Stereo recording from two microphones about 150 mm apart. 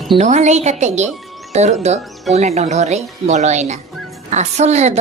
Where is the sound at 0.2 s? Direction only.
50° right (ahead or behind).